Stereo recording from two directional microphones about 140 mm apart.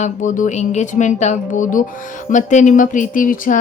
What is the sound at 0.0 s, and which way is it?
Speech, 65° left (ahead or behind).